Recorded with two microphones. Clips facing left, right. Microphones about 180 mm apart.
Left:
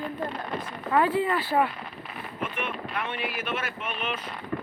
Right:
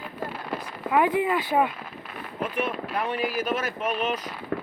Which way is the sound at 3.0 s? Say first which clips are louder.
Right 6 dB; 40° right (ahead or behind).